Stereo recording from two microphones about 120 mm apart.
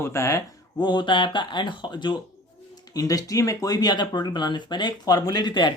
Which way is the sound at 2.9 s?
30° left (ahead or behind).